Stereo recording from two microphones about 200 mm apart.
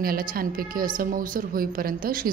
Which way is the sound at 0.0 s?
45° right (ahead or behind).